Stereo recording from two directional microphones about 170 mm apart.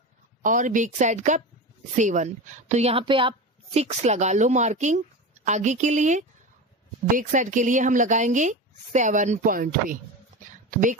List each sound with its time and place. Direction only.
0.4 s a woman's voice: 50° right (ahead or behind)